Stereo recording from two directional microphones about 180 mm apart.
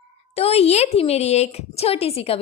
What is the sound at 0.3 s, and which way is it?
A woman's voice, 35° left (ahead or behind).